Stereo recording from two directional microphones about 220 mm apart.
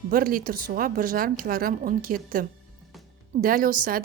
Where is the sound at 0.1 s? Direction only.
40° right (ahead or behind).